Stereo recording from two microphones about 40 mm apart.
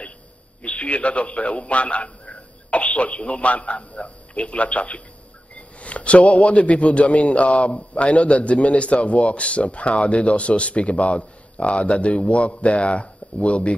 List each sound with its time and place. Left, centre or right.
0.6 s a man's voice: left